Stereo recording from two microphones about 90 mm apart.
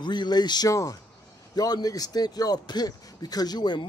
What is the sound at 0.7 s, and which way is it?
Speech, 35° left (ahead or behind).